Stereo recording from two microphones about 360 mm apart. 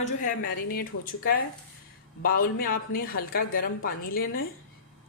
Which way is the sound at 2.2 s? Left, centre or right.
Left.